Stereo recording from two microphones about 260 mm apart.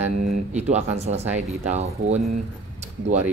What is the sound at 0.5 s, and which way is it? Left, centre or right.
Speech, right.